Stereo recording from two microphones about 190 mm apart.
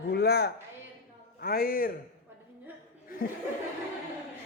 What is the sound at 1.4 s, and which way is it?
Speech, 55° left (ahead or behind).